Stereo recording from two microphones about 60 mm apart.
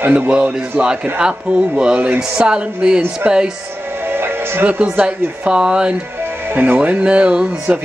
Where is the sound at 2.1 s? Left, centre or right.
Centre.